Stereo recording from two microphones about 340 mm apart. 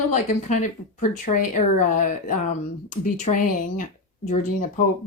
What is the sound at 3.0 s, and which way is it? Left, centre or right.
Speech, left.